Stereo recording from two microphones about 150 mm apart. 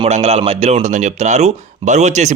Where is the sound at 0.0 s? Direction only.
45° right (ahead or behind).